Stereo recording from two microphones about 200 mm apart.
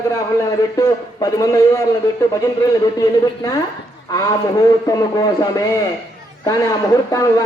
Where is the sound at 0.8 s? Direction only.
20° left (ahead or behind).